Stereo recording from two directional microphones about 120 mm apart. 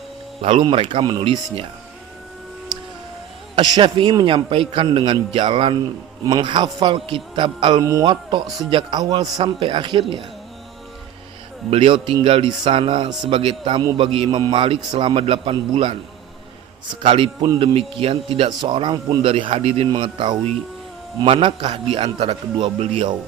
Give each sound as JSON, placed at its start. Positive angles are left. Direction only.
{"t": 0.4, "sound": "a man's voice", "side_deg": -45}
{"t": 3.5, "sound": "a man's voice", "side_deg": -45}
{"t": 8.4, "sound": "speech", "side_deg": 0}
{"t": 8.7, "sound": "a man's voice", "side_deg": -35}
{"t": 9.4, "sound": "a man's voice", "side_deg": -45}
{"t": 11.7, "sound": "a man's voice", "side_deg": -50}
{"t": 17.0, "sound": "a man's voice", "side_deg": -50}
{"t": 19.9, "sound": "a man's voice", "side_deg": -40}